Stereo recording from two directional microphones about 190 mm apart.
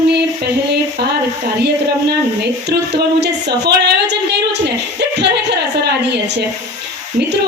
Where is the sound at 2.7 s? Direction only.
60° right (ahead or behind).